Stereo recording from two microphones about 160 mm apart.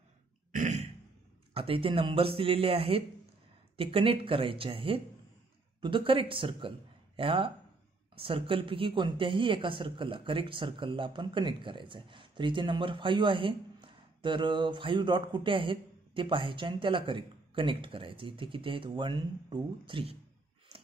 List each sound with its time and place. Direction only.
0.5 s throat clearing: 50° right (ahead or behind)
1.5 s speech: 35° right (ahead or behind)